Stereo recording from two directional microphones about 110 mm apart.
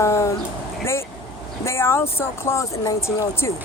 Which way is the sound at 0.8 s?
25° left (ahead or behind).